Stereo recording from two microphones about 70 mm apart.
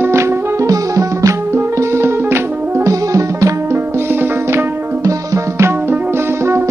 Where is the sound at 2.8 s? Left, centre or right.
Right.